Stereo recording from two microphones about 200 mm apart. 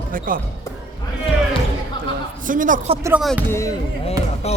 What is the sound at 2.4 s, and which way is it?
Speech, 40° right (ahead or behind).